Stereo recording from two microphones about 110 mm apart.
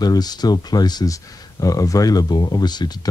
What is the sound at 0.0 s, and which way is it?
Speech, 35° left (ahead or behind).